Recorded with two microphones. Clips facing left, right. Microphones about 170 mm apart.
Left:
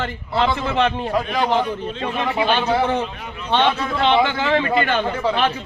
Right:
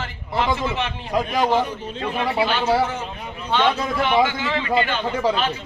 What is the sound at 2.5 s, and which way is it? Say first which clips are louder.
Speech: left 2 dB; 65° left (ahead or behind).